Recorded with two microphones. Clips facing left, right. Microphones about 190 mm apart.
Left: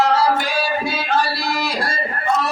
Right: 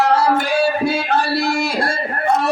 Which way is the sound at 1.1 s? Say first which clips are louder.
Right 3 dB; 60° right (ahead or behind).